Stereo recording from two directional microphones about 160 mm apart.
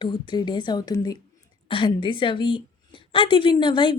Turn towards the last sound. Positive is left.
turn(degrees=30)  # may be behind; listen again after turning